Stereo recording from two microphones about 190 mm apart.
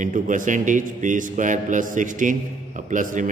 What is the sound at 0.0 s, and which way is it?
A man's voice, 45° right (ahead or behind).